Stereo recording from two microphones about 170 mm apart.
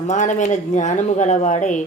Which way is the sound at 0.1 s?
45° left (ahead or behind).